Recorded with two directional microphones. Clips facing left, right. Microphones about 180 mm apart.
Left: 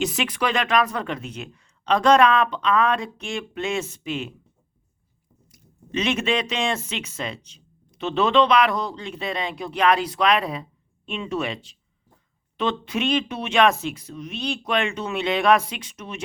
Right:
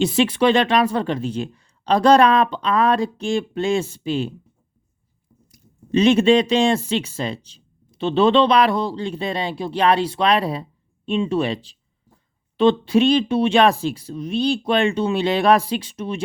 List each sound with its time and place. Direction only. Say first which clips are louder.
0.0 s speech: right 8 dB; 30° right (ahead or behind)
5.5 s speech: right 9 dB; 35° right (ahead or behind)